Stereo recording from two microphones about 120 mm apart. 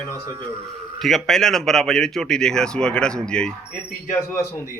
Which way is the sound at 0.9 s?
Centre (ahead or behind).